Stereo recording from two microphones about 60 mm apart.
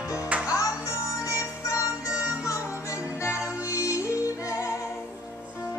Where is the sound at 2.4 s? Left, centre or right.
Left.